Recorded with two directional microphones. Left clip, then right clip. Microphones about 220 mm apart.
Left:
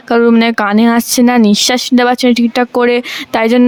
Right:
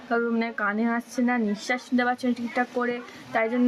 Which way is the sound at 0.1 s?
50° left (ahead or behind).